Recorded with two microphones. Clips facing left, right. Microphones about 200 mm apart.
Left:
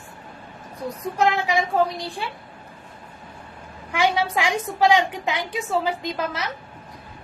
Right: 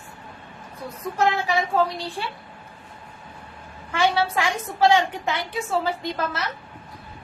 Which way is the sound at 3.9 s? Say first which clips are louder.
Even; 15° left (ahead or behind).